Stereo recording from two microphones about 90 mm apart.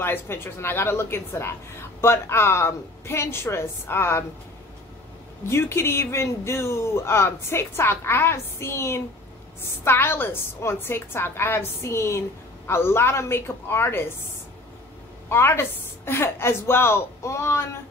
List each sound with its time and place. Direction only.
0.0 s a woman's voice: 25° left (ahead or behind)
5.5 s a woman's voice: 30° left (ahead or behind)
15.2 s a woman's voice: 25° left (ahead or behind)